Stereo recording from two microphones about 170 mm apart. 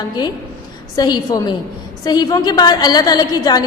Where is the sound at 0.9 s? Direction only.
25° left (ahead or behind).